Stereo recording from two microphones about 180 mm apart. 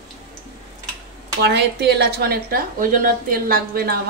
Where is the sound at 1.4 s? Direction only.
65° right (ahead or behind).